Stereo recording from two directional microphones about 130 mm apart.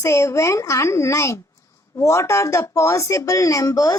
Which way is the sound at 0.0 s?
20° left (ahead or behind).